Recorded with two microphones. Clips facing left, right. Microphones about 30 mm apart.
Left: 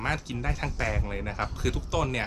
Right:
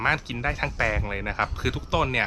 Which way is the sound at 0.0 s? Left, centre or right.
Right.